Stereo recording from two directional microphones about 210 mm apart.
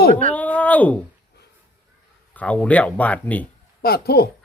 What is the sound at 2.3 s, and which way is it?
Speech, 5° left (ahead or behind).